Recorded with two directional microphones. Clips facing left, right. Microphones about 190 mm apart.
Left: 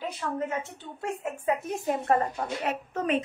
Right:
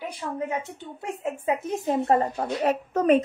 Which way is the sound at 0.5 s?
15° right (ahead or behind).